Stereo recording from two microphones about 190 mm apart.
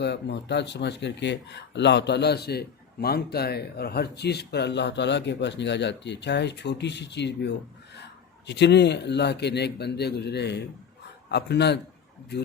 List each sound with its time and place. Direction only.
0.0 s speech: 65° left (ahead or behind)